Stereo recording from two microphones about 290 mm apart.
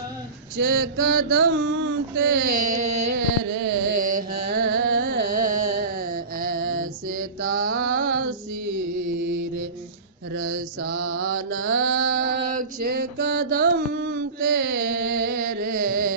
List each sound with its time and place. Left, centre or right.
0.5 s a sound: right
2.5 s carnatic music: right
3.2 s carnatic music: right
4.4 s carnatic music: right
5.5 s music: right
5.8 s mantra: right
11.0 s mantra: right
11.9 s mantra: right